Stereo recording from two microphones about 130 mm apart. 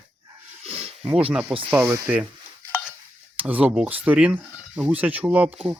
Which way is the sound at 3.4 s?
10° right (ahead or behind).